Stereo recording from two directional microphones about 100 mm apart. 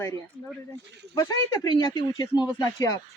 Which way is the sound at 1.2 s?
45° left (ahead or behind).